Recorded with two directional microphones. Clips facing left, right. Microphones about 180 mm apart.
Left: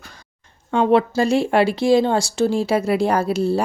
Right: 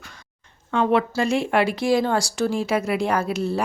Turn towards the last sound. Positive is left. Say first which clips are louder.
# left 4 dB
turn(degrees=30)  # may be behind; listen again after turning